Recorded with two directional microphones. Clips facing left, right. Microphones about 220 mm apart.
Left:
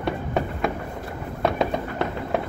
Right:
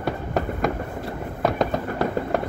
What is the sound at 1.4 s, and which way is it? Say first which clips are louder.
Fireworks: even; centre (ahead or behind).